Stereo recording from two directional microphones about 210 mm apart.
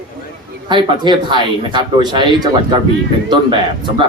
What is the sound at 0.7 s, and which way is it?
Speech, 20° right (ahead or behind).